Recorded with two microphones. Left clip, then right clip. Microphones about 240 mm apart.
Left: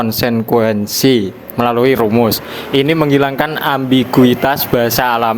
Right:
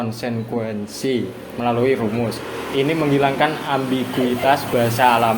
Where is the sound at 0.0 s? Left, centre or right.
Left.